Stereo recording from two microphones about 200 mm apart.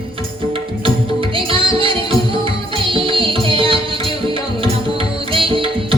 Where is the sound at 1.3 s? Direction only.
25° right (ahead or behind).